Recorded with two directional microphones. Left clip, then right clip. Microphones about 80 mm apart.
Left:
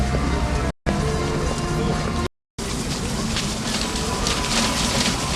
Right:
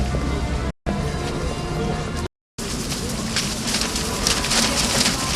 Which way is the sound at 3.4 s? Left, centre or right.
Right.